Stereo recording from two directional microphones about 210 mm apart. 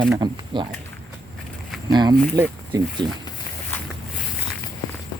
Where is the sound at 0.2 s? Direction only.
20° right (ahead or behind).